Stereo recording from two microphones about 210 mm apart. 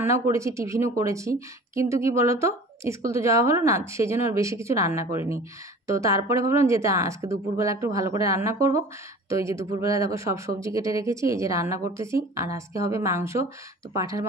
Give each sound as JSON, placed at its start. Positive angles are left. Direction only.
{"t": 0.0, "sound": "speech", "side_deg": -15}